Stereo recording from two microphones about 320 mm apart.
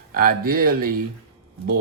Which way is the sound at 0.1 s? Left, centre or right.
Right.